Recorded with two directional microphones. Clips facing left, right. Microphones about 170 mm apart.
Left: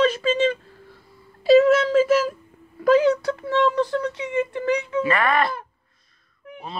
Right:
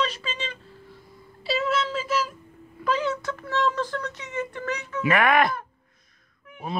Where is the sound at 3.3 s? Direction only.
25° left (ahead or behind).